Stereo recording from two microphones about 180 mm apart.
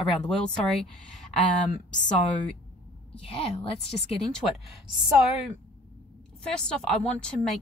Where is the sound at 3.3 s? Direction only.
30° left (ahead or behind).